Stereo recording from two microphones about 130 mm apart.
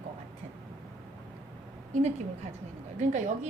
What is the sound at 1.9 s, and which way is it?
A woman's voice, 60° right (ahead or behind).